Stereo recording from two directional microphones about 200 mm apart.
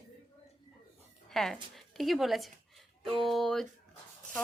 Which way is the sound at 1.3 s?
Centre (ahead or behind).